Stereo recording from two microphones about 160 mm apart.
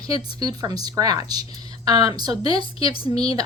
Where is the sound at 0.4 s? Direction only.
25° right (ahead or behind).